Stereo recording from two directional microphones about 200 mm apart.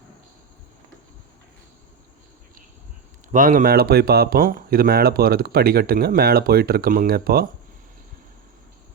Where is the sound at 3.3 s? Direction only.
40° right (ahead or behind).